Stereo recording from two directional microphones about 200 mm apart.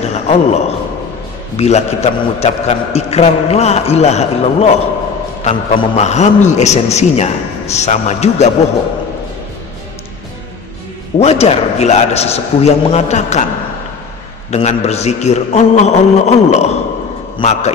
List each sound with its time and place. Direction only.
0.0 s a man's voice: 30° left (ahead or behind)
11.1 s a man's voice: 30° left (ahead or behind)
14.5 s a man's voice: 35° left (ahead or behind)